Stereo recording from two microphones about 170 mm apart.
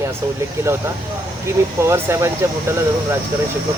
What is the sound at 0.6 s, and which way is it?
Speech, 10° right (ahead or behind).